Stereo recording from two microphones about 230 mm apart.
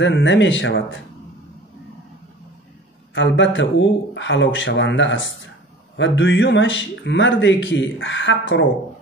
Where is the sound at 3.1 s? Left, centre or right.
Left.